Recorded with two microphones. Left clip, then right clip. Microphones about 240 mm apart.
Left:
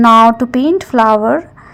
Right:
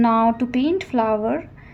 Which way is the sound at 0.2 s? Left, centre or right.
Left.